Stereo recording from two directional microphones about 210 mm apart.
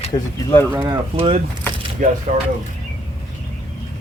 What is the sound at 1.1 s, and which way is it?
Speech, 30° right (ahead or behind).